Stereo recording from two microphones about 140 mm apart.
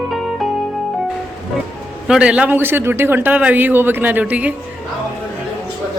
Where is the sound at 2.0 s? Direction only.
5° right (ahead or behind).